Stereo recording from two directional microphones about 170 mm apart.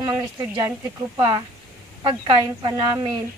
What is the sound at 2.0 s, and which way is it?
A woman's voice, 25° right (ahead or behind).